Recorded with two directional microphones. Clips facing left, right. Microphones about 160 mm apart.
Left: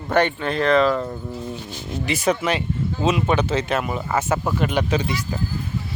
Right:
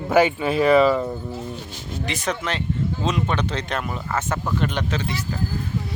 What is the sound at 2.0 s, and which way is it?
Speech, 10° left (ahead or behind).